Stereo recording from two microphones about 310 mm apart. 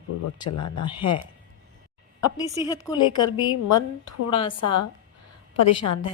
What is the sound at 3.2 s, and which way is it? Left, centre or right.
A woman's voice, left.